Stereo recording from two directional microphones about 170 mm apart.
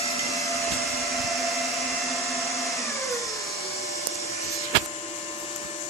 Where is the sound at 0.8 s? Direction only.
Centre (ahead or behind).